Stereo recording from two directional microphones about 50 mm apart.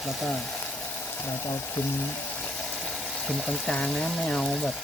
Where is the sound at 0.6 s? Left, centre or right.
Left.